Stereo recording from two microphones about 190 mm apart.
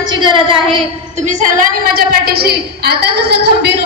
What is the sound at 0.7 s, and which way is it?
A woman's voice, 35° right (ahead or behind).